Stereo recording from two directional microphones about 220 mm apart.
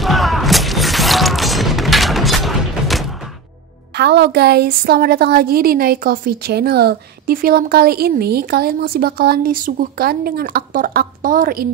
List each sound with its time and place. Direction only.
0.0 s shatter: centre (ahead or behind)
3.9 s a woman's voice: 50° right (ahead or behind)